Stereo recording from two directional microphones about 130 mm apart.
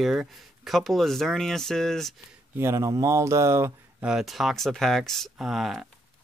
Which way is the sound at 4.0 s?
5° right (ahead or behind).